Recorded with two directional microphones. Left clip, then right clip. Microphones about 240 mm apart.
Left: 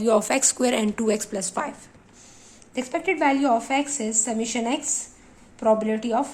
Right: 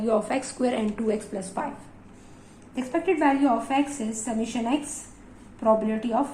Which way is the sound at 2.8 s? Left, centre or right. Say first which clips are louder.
Left 1 dB; left.